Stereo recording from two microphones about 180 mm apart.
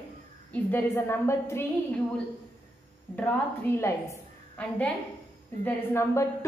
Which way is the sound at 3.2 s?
10° left (ahead or behind).